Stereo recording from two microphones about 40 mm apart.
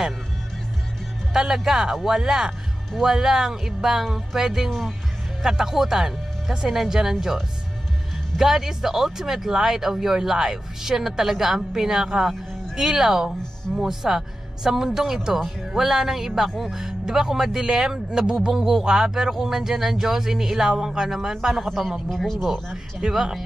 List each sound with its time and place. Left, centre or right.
1.3 s speech: centre
4.6 s speech: centre
5.4 s speech: centre
21.6 s speech: centre
23.0 s speech: centre